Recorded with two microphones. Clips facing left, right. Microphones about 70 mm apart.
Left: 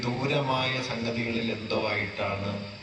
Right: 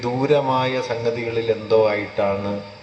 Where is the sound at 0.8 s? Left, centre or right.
Right.